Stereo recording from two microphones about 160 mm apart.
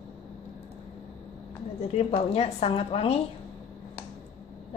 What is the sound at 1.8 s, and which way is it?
A woman's voice, 40° left (ahead or behind).